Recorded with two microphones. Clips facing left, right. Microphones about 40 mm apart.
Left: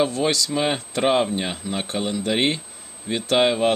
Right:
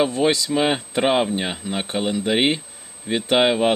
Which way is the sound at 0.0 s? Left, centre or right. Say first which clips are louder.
Right 2 dB; centre.